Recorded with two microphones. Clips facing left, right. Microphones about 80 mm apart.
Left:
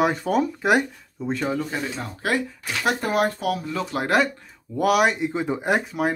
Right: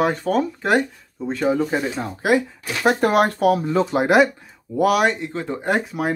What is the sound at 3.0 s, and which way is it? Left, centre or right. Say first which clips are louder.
Speech: right 5 dB; right.